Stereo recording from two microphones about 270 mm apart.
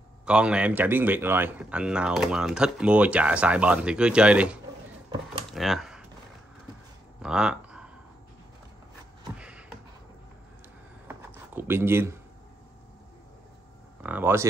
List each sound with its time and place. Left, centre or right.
0.2 s speech: centre
5.5 s typing: centre
7.2 s a sound: centre
9.4 s beatboxing: centre
11.1 s a sound: centre
14.0 s speech: centre